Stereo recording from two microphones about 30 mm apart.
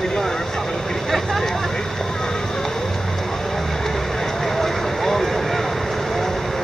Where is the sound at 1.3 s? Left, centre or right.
Centre.